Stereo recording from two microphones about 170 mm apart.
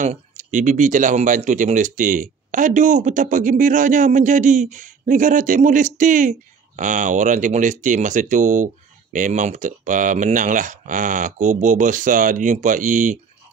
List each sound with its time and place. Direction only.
0.0 s speech: 45° right (ahead or behind)